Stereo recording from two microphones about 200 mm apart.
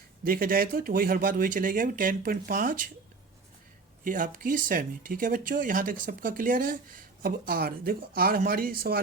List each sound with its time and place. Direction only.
0.3 s speech: 45° right (ahead or behind)
4.0 s speech: 40° right (ahead or behind)